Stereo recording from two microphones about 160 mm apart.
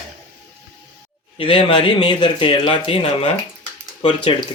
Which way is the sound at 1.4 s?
35° left (ahead or behind).